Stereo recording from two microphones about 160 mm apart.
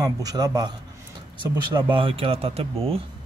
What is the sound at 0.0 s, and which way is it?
A man's voice, 25° right (ahead or behind).